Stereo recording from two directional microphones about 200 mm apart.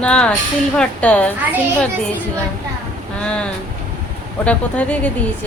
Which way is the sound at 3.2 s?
5° left (ahead or behind).